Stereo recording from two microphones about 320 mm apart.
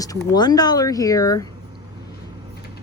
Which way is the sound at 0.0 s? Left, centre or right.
Centre.